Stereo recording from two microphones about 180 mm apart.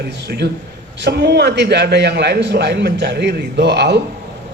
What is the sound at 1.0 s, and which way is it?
A man's voice, 65° right (ahead or behind).